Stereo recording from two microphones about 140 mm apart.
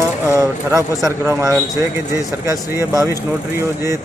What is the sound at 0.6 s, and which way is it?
Speech, 20° right (ahead or behind).